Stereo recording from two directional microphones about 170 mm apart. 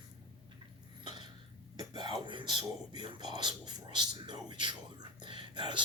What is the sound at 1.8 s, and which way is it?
Speech, 25° right (ahead or behind).